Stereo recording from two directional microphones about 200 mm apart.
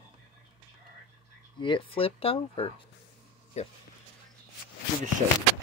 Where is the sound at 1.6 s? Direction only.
25° left (ahead or behind).